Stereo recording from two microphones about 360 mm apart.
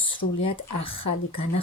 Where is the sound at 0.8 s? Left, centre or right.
Centre.